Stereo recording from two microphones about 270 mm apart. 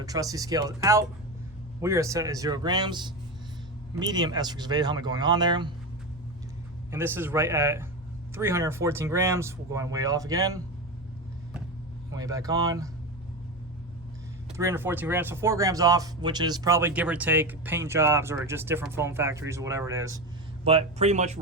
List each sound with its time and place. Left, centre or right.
0.0 s speech: centre
6.9 s speech: centre
12.1 s speech: centre
14.5 s speech: centre
20.7 s speech: right